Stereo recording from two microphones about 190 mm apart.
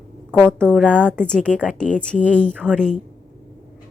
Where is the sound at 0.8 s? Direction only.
5° left (ahead or behind).